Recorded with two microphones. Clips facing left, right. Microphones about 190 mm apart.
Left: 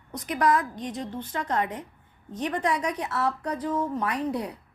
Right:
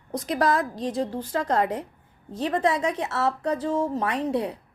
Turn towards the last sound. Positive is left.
turn(degrees=-25)  # may be behind; listen again after turning